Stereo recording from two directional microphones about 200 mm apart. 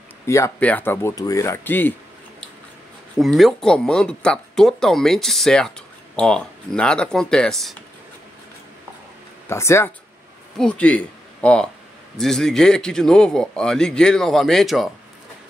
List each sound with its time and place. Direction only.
0.3 s speech: 10° left (ahead or behind)
3.2 s speech: centre (ahead or behind)
9.5 s speech: 15° left (ahead or behind)